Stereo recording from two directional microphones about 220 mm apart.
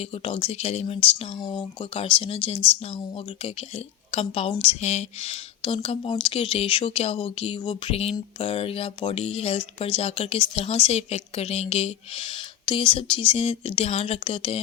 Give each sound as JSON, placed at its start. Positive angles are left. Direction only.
{"t": 0.0, "sound": "speech", "side_deg": 25}
{"t": 4.1, "sound": "speech", "side_deg": 25}